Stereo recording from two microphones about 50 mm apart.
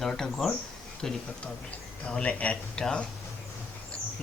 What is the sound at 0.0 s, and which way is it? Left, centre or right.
A man's voice, centre.